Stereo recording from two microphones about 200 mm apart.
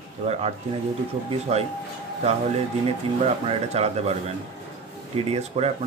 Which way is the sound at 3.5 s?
30° right (ahead or behind).